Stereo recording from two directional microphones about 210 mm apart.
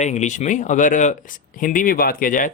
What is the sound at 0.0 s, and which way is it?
Speech, 35° left (ahead or behind).